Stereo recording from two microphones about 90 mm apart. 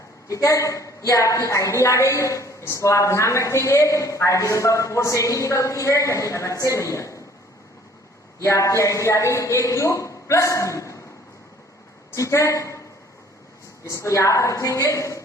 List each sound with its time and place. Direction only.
0.3 s a woman's voice: 35° left (ahead or behind)
8.4 s a woman's voice: 35° left (ahead or behind)
12.1 s a woman's voice: 35° left (ahead or behind)
13.8 s a woman's voice: 35° left (ahead or behind)